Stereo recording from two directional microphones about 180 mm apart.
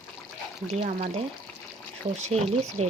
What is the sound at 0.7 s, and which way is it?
Speech, 40° right (ahead or behind).